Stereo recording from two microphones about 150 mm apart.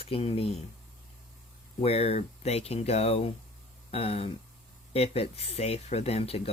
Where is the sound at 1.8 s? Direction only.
40° left (ahead or behind).